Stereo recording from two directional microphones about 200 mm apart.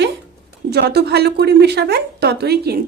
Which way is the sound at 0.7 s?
55° right (ahead or behind).